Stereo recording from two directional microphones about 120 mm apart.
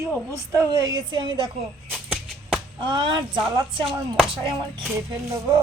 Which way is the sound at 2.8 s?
45° right (ahead or behind).